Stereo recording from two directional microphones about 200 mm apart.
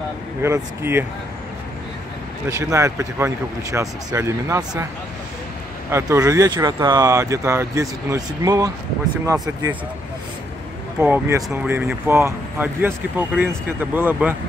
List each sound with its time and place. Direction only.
0.4 s speech: 10° right (ahead or behind)
2.5 s speech: 15° right (ahead or behind)
5.9 s speech: 15° right (ahead or behind)
11.0 s speech: 10° right (ahead or behind)